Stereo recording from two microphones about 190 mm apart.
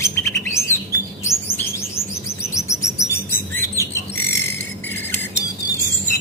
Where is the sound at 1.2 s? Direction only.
15° left (ahead or behind).